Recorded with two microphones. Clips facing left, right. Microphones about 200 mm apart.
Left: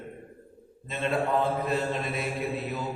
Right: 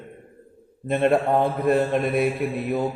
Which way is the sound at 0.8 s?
55° right (ahead or behind).